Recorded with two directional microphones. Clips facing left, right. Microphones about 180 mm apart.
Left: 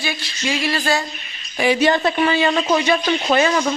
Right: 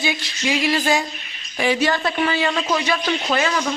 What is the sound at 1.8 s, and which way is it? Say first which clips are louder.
A man's voice: left 4 dB; 25° left (ahead or behind).